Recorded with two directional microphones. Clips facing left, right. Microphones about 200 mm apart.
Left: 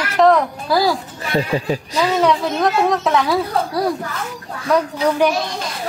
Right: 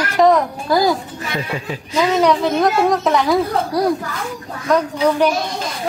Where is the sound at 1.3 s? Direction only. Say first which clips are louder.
Left 6 dB; 30° left (ahead or behind).